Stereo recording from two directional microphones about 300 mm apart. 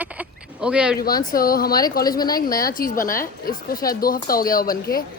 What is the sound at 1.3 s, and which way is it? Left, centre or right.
Speech, left.